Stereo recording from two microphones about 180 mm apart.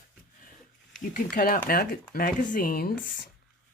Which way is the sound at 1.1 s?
50° left (ahead or behind).